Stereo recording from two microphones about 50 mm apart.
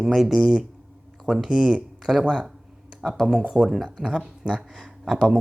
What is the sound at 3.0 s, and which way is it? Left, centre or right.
Speech, centre.